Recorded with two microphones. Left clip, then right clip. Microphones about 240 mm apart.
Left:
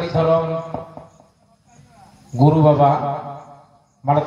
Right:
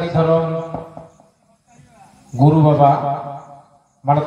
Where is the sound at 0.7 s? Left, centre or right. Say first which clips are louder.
Even; left.